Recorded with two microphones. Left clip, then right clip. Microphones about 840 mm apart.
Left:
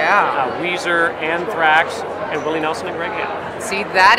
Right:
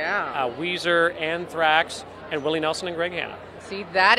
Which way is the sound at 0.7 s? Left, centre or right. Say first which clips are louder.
Left 1 dB; right.